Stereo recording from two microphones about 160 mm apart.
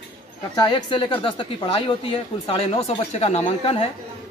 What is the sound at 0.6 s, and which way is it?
A woman's voice, 30° left (ahead or behind).